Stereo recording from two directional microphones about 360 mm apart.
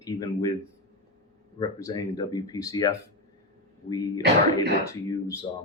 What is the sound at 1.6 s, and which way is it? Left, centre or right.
Speech, centre.